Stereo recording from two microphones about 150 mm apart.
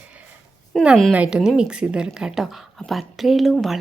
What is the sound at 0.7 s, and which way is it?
A woman's voice, centre (ahead or behind).